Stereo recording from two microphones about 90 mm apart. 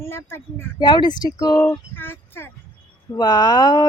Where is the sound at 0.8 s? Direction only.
55° left (ahead or behind).